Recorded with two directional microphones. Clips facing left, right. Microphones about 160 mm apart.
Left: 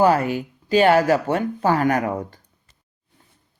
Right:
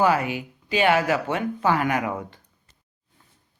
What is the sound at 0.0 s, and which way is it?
Speech, 45° left (ahead or behind).